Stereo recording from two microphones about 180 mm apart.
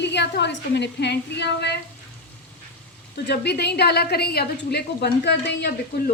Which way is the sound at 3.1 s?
65° left (ahead or behind).